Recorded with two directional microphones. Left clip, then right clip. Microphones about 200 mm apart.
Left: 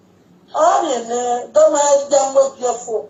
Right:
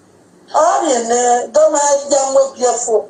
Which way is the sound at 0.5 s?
40° right (ahead or behind).